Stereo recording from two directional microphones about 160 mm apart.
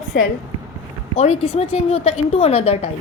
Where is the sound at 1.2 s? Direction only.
40° left (ahead or behind).